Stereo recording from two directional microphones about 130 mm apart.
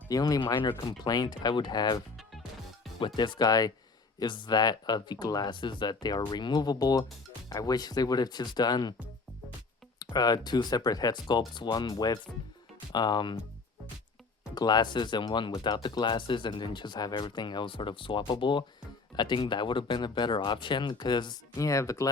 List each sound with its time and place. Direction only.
0.1 s speech: 30° left (ahead or behind)
2.1 s music: centre (ahead or behind)
3.2 s speech: 35° left (ahead or behind)
10.0 s speech: 30° left (ahead or behind)
14.5 s speech: 30° left (ahead or behind)